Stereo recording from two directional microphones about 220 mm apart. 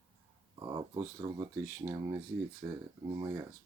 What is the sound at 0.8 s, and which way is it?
Speech, 15° right (ahead or behind).